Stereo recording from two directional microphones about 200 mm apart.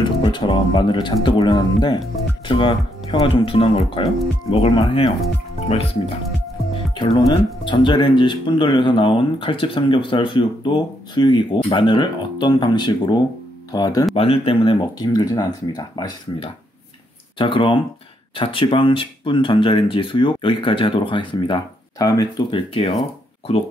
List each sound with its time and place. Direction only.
0.2 s speech: 25° left (ahead or behind)
14.1 s speech: 30° left (ahead or behind)